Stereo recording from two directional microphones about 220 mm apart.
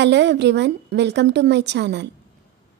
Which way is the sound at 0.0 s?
55° right (ahead or behind).